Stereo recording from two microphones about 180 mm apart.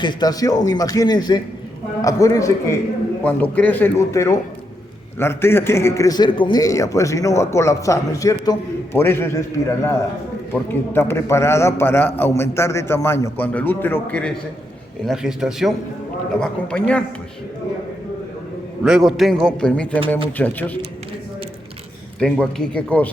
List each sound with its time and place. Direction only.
0.0 s a man's voice: 25° left (ahead or behind)
10.5 s a man's voice: 15° left (ahead or behind)
18.8 s a man's voice: centre (ahead or behind)
22.2 s a man's voice: 5° left (ahead or behind)